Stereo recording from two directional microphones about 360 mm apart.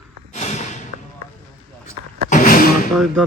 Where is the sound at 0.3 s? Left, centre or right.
Centre.